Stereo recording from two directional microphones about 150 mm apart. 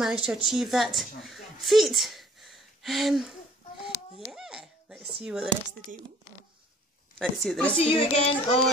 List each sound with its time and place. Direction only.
0.0 s a woman's voice: 5° right (ahead or behind)
3.8 s a sound: 5° right (ahead or behind)
5.2 s speech: 5° right (ahead or behind)
7.2 s a woman's voice: 5° left (ahead or behind)
7.7 s speech: 40° left (ahead or behind)